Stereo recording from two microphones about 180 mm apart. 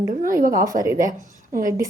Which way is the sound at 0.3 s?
50° right (ahead or behind).